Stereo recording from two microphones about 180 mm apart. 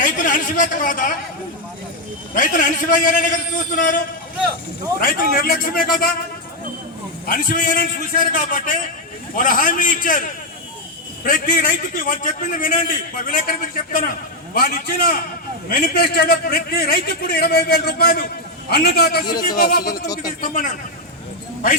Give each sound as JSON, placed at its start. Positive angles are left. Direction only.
{"t": 0.0, "sound": "a man's voice", "side_deg": 45}
{"t": 2.3, "sound": "a man's voice", "side_deg": 50}
{"t": 7.3, "sound": "a man's voice", "side_deg": 50}